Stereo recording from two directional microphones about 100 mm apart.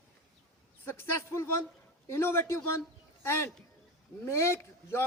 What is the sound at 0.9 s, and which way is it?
A man's voice, 25° left (ahead or behind).